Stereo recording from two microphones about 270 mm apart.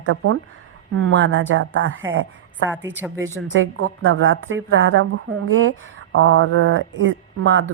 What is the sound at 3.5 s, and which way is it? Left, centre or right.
A woman's voice, right.